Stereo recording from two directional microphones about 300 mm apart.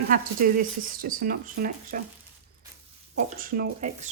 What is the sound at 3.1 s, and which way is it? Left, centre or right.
Speech, right.